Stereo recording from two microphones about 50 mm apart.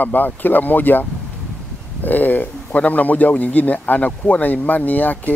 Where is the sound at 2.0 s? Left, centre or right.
Left.